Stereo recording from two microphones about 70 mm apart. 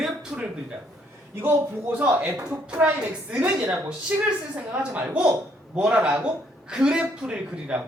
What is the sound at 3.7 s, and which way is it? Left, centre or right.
Speech, right.